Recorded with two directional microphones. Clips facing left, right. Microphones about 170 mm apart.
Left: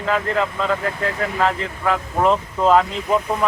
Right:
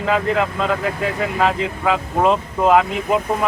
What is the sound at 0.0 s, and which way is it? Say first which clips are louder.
Speech: right 2 dB; 15° right (ahead or behind).